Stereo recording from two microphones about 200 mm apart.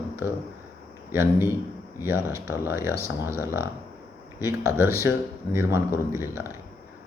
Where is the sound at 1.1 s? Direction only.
10° right (ahead or behind).